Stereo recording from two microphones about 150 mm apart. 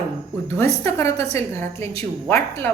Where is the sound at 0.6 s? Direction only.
20° left (ahead or behind).